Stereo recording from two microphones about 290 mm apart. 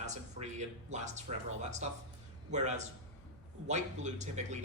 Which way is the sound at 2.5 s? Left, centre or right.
Right.